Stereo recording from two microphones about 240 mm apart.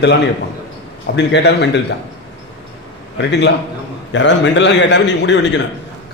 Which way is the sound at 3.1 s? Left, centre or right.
Left.